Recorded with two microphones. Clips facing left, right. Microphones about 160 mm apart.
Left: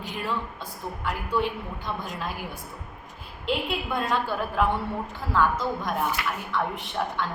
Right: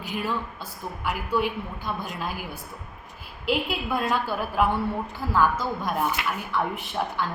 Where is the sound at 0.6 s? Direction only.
5° right (ahead or behind).